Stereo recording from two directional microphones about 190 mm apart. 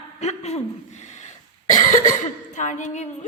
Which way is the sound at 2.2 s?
40° left (ahead or behind).